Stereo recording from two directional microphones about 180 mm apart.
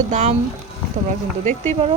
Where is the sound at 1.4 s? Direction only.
40° right (ahead or behind).